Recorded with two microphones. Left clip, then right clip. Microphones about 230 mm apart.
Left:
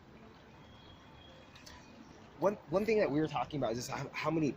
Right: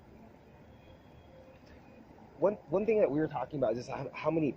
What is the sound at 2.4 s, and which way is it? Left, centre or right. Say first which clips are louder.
Speech: right 2 dB; left.